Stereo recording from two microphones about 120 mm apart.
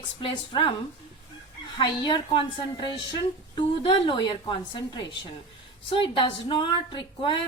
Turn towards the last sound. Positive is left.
turn(degrees=45)  # may be behind; listen again after turning